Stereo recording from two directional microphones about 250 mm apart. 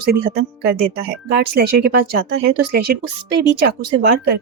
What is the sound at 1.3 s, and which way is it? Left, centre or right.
Speech, right.